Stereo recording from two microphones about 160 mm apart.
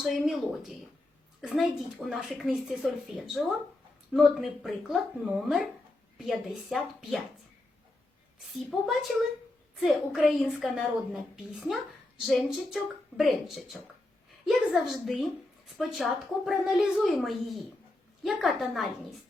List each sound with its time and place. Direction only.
0.0 s a woman's voice: centre (ahead or behind)
8.5 s a woman's voice: centre (ahead or behind)
12.2 s a woman's voice: centre (ahead or behind)